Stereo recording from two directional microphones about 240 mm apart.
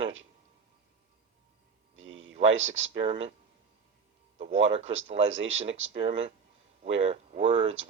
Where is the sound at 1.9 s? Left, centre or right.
Right.